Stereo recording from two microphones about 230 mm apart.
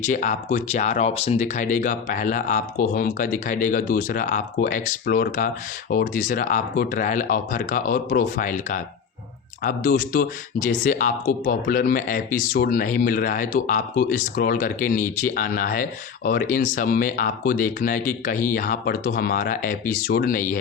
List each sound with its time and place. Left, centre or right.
0.0 s speech: left